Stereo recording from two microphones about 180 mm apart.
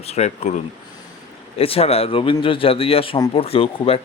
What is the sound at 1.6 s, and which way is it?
Speech, 35° left (ahead or behind).